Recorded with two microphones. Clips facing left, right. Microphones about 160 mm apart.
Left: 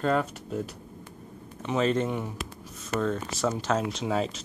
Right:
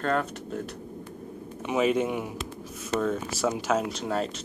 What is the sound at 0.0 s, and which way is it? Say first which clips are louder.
Speech: left 1 dB; 5° left (ahead or behind).